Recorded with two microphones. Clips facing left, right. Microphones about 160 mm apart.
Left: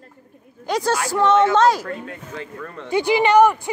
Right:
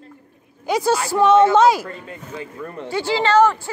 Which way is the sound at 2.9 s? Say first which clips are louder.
Left 3 dB; 15° left (ahead or behind).